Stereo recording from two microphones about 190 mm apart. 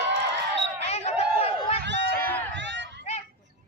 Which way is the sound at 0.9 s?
35° left (ahead or behind).